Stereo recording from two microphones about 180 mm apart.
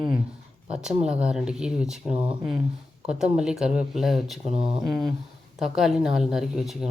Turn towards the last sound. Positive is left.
turn(degrees=0)  # may be behind; listen again after turning